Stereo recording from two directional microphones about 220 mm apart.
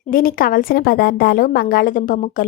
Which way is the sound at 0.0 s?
40° left (ahead or behind).